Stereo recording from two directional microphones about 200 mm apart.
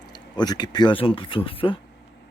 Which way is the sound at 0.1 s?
20° left (ahead or behind).